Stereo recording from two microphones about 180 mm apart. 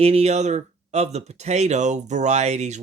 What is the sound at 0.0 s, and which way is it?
Speech, 35° right (ahead or behind).